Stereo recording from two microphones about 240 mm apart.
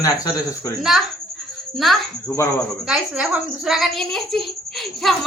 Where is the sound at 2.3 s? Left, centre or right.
Centre.